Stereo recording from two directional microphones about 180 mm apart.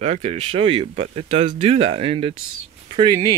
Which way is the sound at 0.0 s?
35° right (ahead or behind).